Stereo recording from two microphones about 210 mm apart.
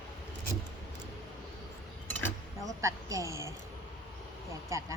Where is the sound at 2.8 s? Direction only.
15° right (ahead or behind).